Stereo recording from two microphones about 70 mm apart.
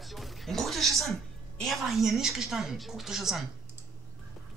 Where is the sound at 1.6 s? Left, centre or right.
Centre.